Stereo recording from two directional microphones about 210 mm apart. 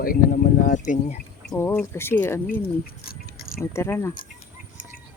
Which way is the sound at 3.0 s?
45° left (ahead or behind).